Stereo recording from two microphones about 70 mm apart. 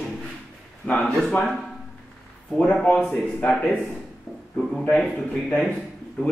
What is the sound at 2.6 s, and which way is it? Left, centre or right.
Speech, centre.